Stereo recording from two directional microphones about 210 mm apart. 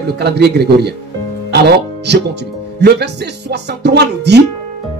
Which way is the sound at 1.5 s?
50° right (ahead or behind).